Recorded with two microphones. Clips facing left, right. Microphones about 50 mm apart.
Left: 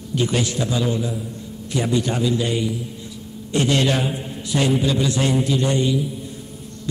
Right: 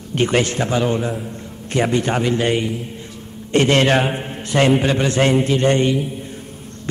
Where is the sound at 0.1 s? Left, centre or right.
Right.